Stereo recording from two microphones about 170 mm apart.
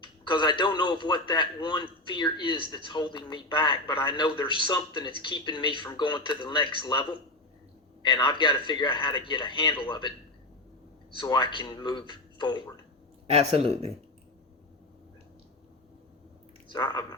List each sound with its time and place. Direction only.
0.0 s speech: 25° left (ahead or behind)
11.2 s speech: 30° left (ahead or behind)
13.2 s speech: 35° right (ahead or behind)
16.7 s speech: 25° left (ahead or behind)